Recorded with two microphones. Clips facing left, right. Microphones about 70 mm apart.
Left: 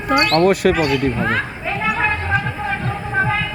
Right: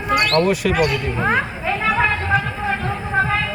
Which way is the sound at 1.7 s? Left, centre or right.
Centre.